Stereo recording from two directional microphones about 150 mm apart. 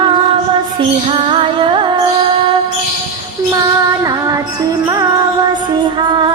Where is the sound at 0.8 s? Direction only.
35° right (ahead or behind).